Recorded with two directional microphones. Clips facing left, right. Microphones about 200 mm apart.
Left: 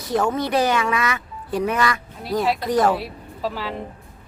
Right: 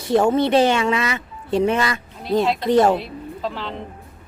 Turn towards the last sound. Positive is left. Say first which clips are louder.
# even
turn(degrees=5)  # may be behind; listen again after turning